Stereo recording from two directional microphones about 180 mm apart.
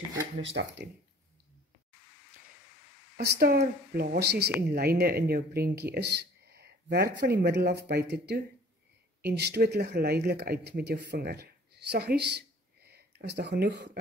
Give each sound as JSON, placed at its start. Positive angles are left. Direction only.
{"t": 0.4, "sound": "speech", "side_deg": -85}
{"t": 3.2, "sound": "speech", "side_deg": -60}